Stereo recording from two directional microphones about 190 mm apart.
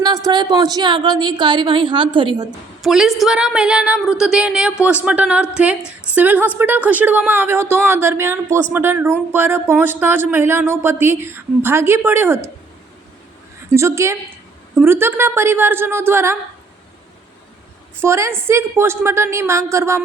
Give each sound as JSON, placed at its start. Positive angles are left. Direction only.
{"t": 0.0, "sound": "a woman's voice", "side_deg": -20}
{"t": 2.8, "sound": "a woman's voice", "side_deg": 0}
{"t": 13.7, "sound": "speech", "side_deg": -15}
{"t": 18.0, "sound": "speech", "side_deg": -15}